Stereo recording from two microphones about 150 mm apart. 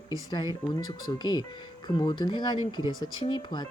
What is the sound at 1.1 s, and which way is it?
Speech, 30° left (ahead or behind).